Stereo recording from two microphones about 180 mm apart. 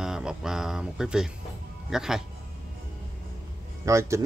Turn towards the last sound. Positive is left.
turn(degrees=-15)  # may be behind; listen again after turning